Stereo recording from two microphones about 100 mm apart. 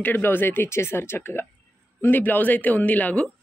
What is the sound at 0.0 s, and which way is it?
A woman's voice, 20° left (ahead or behind).